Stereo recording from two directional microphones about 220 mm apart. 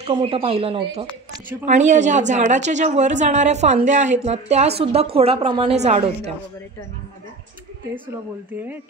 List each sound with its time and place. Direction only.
0.0 s a woman's voice: 25° right (ahead or behind)